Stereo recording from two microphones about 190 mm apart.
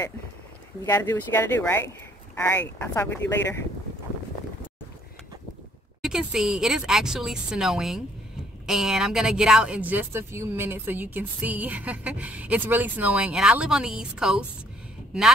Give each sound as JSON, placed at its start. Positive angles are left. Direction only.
{"t": 0.8, "sound": "speech", "side_deg": 10}
{"t": 6.0, "sound": "speech", "side_deg": -5}